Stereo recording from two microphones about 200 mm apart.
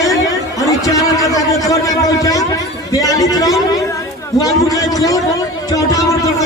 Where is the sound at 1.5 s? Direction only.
15° left (ahead or behind).